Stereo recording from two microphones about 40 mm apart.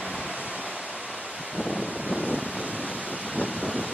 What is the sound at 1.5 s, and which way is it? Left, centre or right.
Waves, right.